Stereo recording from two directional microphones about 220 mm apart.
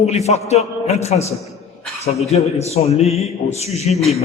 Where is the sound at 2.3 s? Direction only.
30° left (ahead or behind).